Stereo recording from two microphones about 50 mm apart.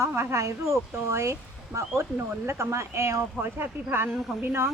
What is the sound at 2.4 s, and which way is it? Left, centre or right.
Speech, right.